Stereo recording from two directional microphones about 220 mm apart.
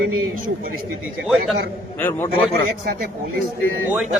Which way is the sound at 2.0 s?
10° left (ahead or behind).